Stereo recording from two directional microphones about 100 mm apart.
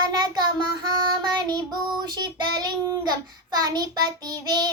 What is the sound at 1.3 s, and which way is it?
Child singing, 45° right (ahead or behind).